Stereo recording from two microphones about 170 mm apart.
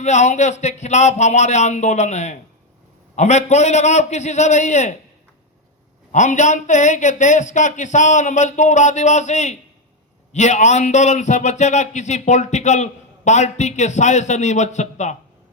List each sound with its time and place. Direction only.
0.0 s a man's voice: 45° left (ahead or behind)
6.1 s a man's voice: 45° left (ahead or behind)